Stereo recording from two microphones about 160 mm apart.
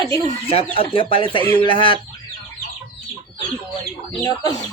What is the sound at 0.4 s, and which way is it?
Speech, 35° left (ahead or behind).